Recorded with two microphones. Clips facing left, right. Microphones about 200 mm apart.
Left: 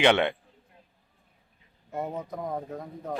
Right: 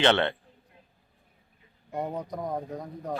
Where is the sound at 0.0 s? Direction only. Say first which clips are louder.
Left 1 dB; 10° left (ahead or behind).